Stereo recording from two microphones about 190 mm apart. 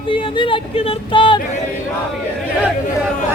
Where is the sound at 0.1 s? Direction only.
25° left (ahead or behind).